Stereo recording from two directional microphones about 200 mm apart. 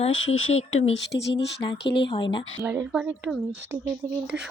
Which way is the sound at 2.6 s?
10° right (ahead or behind).